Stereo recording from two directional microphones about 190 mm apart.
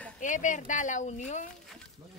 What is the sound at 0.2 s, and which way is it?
Speech, 40° left (ahead or behind).